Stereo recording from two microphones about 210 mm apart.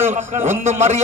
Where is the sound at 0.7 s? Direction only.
35° right (ahead or behind).